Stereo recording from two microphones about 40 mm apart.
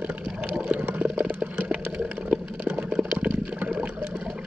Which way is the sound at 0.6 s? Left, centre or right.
Right.